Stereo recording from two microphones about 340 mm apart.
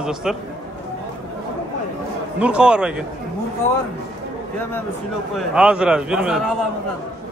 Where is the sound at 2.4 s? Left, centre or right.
Centre.